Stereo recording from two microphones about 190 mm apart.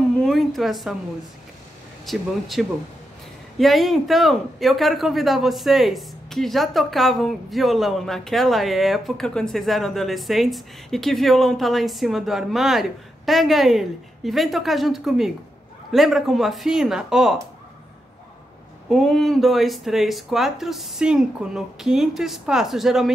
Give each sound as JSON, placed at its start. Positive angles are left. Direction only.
{"t": 0.2, "sound": "a sound", "side_deg": 0}
{"t": 2.0, "sound": "speech", "side_deg": 0}
{"t": 18.9, "sound": "speech", "side_deg": 0}